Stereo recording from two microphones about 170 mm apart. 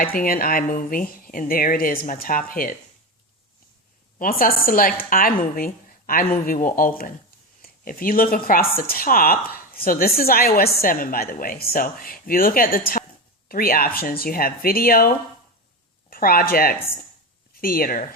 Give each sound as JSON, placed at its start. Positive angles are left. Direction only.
{"t": 0.0, "sound": "speech", "side_deg": 55}
{"t": 4.2, "sound": "speech", "side_deg": 55}